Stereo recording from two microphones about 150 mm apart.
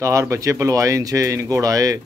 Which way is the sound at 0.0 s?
20° right (ahead or behind).